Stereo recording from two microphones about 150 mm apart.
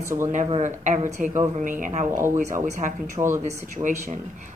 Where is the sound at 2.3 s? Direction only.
60° right (ahead or behind).